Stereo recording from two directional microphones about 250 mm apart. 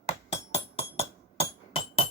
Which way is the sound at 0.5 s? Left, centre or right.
Left.